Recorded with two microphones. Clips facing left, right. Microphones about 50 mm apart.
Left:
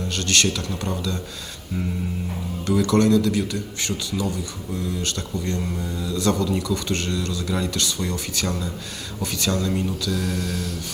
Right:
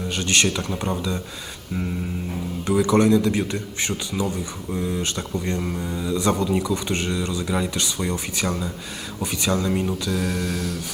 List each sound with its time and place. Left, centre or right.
0.1 s speech: centre
2.6 s speech: centre